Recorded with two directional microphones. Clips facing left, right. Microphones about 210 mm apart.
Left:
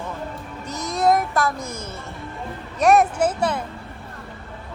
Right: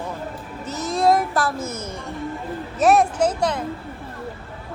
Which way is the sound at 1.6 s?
10° left (ahead or behind).